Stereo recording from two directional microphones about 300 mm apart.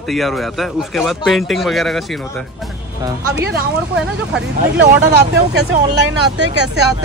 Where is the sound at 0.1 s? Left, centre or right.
Centre.